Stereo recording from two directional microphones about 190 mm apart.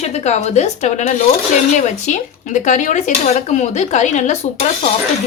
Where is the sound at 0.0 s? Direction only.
35° left (ahead or behind).